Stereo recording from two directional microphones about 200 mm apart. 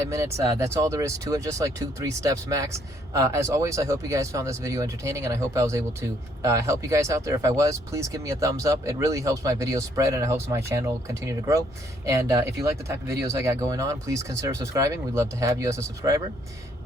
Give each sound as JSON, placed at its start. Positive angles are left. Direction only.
{"t": 0.1, "sound": "speech", "side_deg": -15}